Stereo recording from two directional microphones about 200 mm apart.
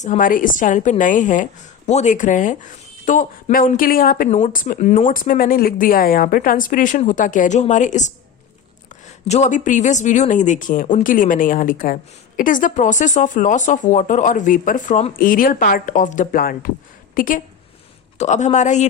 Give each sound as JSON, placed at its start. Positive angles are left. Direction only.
{"t": 0.0, "sound": "a woman's voice", "side_deg": 40}